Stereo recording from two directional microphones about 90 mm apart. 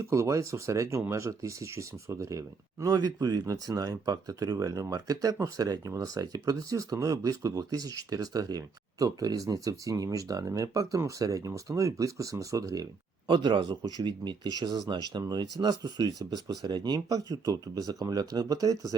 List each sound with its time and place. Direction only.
0.0 s speech: 35° right (ahead or behind)
13.2 s speech: 60° right (ahead or behind); by 18.9 s 40° right (ahead or behind)